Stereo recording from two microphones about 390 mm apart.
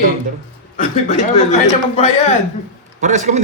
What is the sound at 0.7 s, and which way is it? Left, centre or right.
Speech, centre.